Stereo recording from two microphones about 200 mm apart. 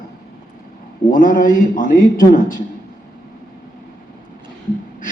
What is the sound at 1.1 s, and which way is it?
A man's voice, 45° left (ahead or behind).